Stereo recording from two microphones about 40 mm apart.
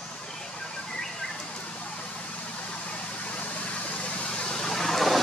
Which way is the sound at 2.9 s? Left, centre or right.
Left.